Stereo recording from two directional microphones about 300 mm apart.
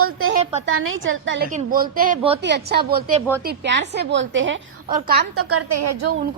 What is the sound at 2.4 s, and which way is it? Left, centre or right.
A woman's voice, right.